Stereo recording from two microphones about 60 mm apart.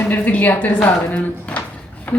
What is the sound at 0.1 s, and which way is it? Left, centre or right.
A woman's voice, left.